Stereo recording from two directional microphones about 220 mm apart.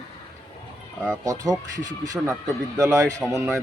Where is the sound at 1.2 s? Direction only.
15° right (ahead or behind).